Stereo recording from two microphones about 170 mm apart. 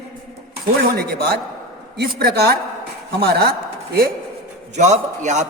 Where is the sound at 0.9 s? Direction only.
65° right (ahead or behind).